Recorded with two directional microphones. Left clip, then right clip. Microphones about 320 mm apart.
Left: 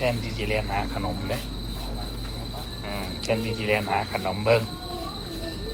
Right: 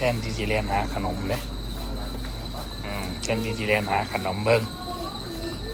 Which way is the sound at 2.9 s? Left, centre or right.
Centre.